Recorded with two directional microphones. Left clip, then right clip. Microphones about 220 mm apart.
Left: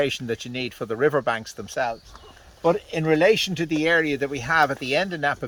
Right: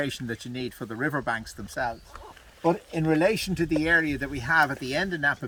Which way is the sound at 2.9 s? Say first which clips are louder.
Left 7 dB; 30° left (ahead or behind).